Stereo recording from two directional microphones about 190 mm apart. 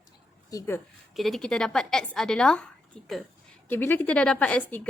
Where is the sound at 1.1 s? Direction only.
Centre (ahead or behind).